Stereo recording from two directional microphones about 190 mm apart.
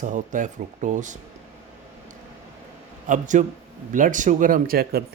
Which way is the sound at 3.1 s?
40° right (ahead or behind).